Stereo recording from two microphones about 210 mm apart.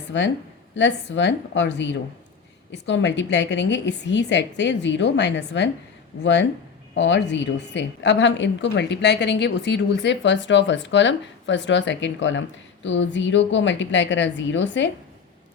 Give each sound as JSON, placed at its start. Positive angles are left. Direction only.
{"t": 0.8, "sound": "a woman's voice", "side_deg": 55}